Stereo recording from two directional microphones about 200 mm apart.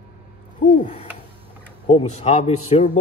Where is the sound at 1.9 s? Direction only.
30° left (ahead or behind).